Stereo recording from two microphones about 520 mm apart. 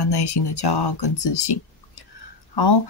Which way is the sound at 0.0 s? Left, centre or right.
Left.